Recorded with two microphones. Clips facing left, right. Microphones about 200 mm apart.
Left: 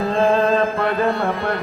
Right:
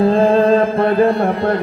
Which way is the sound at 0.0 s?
30° right (ahead or behind).